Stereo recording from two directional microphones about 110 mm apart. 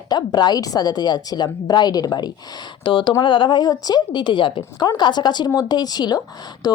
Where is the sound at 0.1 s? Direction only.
40° left (ahead or behind).